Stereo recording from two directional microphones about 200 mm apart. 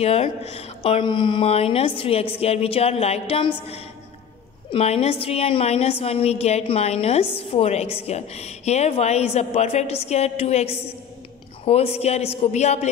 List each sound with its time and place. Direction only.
0.0 s a woman's voice: 30° left (ahead or behind)